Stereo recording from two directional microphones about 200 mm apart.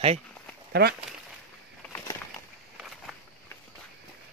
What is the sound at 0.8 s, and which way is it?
Speech, 50° right (ahead or behind).